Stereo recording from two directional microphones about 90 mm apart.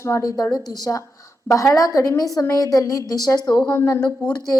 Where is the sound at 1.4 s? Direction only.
35° left (ahead or behind).